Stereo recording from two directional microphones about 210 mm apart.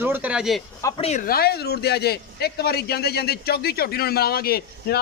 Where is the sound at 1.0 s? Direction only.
30° left (ahead or behind).